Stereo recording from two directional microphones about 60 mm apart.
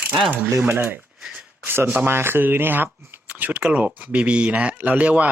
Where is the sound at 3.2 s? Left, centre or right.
Right.